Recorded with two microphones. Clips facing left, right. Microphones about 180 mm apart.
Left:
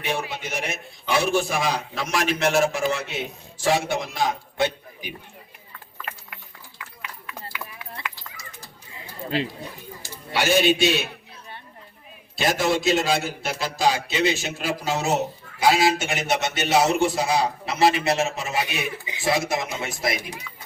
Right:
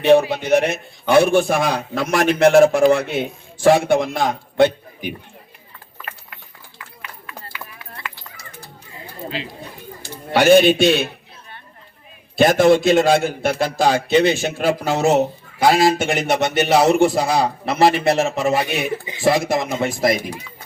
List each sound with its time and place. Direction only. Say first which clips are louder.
0.4 s speech: right 13 dB; 60° right (ahead or behind)
8.1 s a sound: right 3 dB; 60° right (ahead or behind)
10.0 s a man's voice: right 9 dB; 55° right (ahead or behind)
12.4 s speech: right 10 dB; 55° right (ahead or behind)